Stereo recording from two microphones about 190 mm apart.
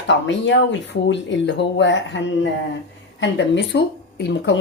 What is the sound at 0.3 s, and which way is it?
Speech, 70° left (ahead or behind).